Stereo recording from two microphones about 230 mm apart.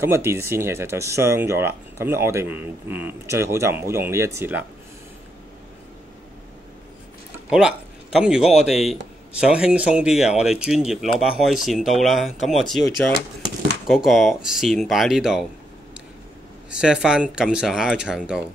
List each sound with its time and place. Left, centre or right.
0.0 s speech: centre
7.4 s speech: centre
16.7 s speech: centre